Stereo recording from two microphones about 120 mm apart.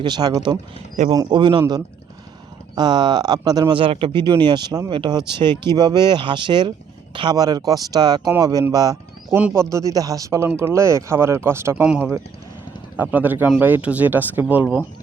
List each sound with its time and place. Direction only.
0.0 s speech: 35° right (ahead or behind)
3.8 s a man's voice: 45° right (ahead or behind); by 9.0 s 30° right (ahead or behind)
9.3 s speech: 20° right (ahead or behind)
13.0 s speech: 15° right (ahead or behind)